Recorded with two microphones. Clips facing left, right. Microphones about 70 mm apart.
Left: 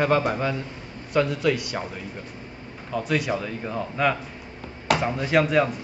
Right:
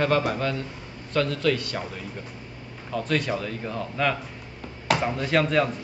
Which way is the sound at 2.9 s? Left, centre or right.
Centre.